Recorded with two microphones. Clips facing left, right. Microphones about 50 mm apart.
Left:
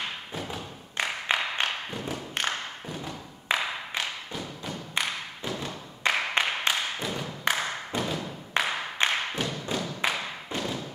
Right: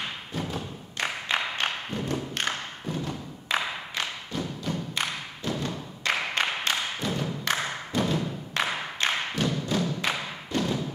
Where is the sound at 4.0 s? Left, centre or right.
Centre.